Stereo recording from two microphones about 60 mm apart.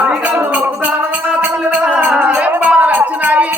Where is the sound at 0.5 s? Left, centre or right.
Right.